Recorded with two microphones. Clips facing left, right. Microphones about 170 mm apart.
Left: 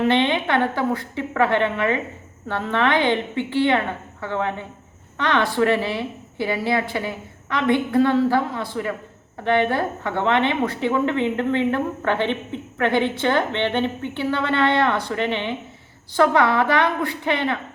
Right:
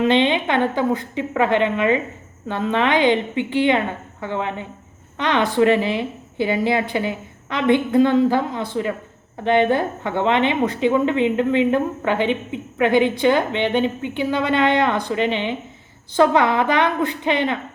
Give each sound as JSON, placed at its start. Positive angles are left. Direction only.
{"t": 0.1, "sound": "a woman's voice", "side_deg": -20}